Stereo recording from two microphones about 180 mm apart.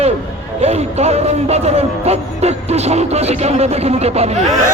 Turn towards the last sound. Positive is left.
turn(degrees=-40)  # may be behind; listen again after turning